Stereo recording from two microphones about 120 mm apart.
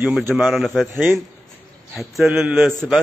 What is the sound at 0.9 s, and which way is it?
Speech, 20° right (ahead or behind).